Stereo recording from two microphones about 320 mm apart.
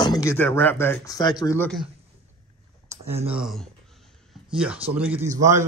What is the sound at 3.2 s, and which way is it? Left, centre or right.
Speech, centre.